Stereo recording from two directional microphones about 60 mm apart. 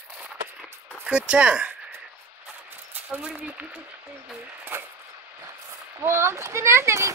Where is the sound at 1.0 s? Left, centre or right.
Centre.